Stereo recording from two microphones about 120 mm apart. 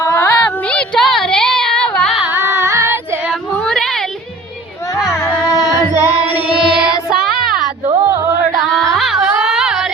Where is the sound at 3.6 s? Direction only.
5° left (ahead or behind).